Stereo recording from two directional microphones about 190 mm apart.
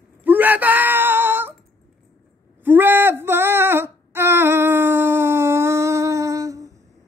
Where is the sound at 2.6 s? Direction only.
10° right (ahead or behind).